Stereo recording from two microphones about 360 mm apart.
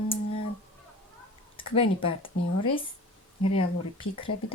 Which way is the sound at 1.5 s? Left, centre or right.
Centre.